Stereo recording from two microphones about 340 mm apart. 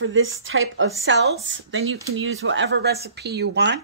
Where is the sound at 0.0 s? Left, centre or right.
Right.